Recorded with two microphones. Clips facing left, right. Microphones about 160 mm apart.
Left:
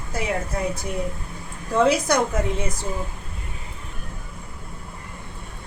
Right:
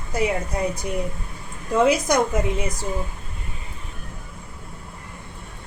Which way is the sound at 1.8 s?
15° right (ahead or behind).